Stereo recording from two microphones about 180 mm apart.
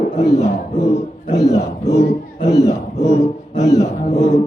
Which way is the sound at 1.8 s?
35° left (ahead or behind).